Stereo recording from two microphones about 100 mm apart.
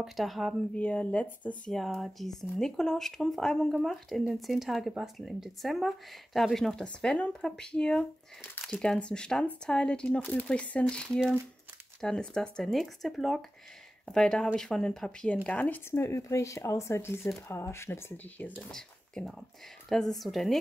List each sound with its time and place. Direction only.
0.0 s speech: centre (ahead or behind)
0.7 s speech: 15° left (ahead or behind)
1.7 s speech: centre (ahead or behind)
15.9 s speech: 30° left (ahead or behind)
18.6 s speech: 5° left (ahead or behind)